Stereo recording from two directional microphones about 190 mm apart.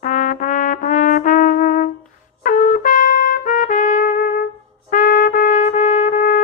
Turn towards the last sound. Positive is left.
turn(degrees=45)  # may be behind; listen again after turning